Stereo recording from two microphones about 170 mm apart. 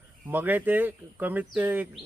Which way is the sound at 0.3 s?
10° right (ahead or behind).